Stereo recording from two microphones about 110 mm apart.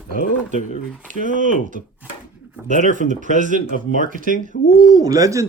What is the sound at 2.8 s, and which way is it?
Speech, 90° right.